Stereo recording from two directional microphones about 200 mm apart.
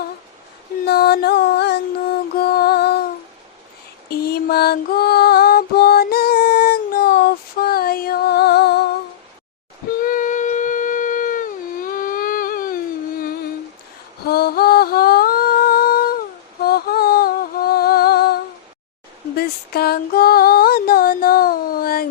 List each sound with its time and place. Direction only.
0.9 s music: 50° left (ahead or behind)
4.1 s mantra: 50° left (ahead or behind)
7.6 s music: 50° left (ahead or behind)
10.0 s a sound: 40° left (ahead or behind)
14.3 s humming: 50° left (ahead or behind)
16.6 s music: 50° left (ahead or behind)
19.4 s music: 50° left (ahead or behind)